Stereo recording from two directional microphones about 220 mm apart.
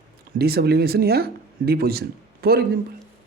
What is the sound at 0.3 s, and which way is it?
Speech, 45° right (ahead or behind).